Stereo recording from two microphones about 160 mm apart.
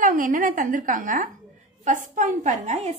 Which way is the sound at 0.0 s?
55° right (ahead or behind).